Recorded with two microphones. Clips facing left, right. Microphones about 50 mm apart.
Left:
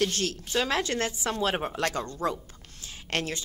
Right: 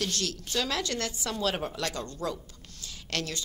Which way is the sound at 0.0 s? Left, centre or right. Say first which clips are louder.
Left 4 dB; left.